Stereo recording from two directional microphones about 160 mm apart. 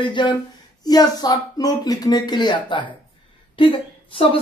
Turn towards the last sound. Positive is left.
turn(degrees=30)  # may be behind; listen again after turning